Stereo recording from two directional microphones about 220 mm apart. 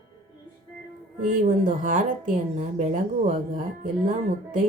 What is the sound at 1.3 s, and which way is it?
Speech, 35° right (ahead or behind).